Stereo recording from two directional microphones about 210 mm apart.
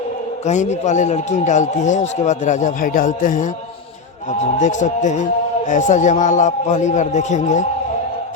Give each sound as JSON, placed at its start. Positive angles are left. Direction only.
{"t": 0.4, "sound": "a man's voice", "side_deg": 35}